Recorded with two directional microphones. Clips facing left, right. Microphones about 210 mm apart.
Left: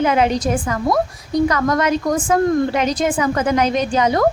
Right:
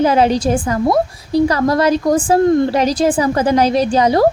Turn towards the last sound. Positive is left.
turn(degrees=-35)  # may be behind; listen again after turning